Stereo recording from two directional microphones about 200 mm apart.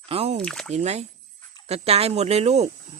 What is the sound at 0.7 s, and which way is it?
Speech, 35° right (ahead or behind).